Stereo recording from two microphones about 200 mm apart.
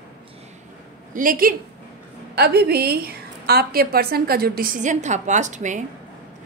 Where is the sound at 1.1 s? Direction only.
45° right (ahead or behind).